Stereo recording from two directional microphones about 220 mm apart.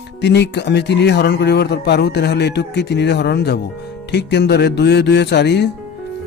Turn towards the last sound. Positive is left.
turn(degrees=50)  # may be behind; listen again after turning